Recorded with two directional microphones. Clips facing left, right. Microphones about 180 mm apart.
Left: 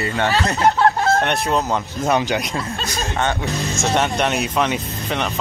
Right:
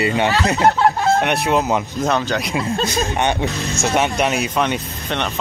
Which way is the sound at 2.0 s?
10° left (ahead or behind).